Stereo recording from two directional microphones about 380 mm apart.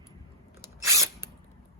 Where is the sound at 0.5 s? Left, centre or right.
Centre.